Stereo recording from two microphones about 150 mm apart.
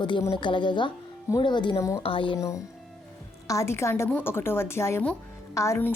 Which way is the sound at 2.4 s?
20° left (ahead or behind).